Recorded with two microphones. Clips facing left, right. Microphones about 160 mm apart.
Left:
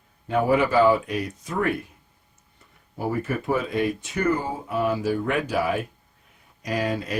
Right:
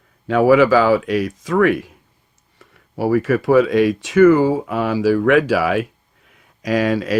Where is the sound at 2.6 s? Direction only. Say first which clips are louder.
Right 9 dB; 75° right (ahead or behind).